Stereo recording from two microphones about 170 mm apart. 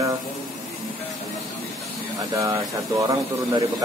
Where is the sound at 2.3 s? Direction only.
20° right (ahead or behind).